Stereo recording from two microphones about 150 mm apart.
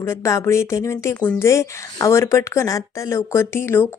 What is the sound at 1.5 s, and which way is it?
A woman's voice, 20° left (ahead or behind).